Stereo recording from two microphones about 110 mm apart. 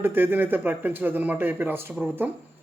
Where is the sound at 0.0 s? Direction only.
20° right (ahead or behind).